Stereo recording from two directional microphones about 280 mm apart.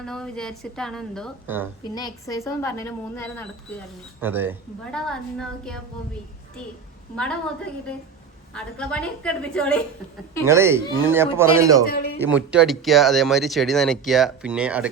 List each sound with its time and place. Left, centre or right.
0.0 s speech: centre
2.0 s a woman's voice: centre
4.2 s speech: centre
7.2 s speech: centre
10.4 s a man's voice: centre
11.9 s speech: left
12.2 s speech: centre